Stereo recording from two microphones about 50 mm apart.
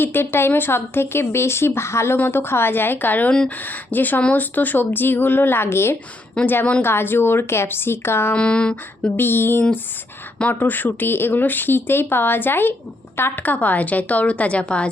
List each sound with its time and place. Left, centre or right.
0.0 s speech: left
2.1 s speech: left
6.4 s speech: left
8.4 s a woman's voice: left
8.7 s a woman's voice: left
13.4 s a woman's voice: left